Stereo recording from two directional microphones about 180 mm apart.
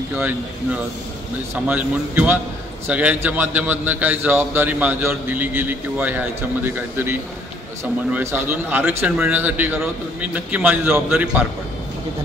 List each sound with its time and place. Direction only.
0.1 s a man's voice: 10° right (ahead or behind)
1.5 s a man's voice: 10° right (ahead or behind)